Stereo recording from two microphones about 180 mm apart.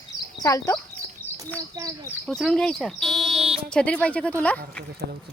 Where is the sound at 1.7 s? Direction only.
20° right (ahead or behind).